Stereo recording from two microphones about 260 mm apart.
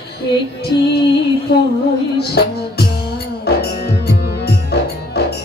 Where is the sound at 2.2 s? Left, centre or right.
Left.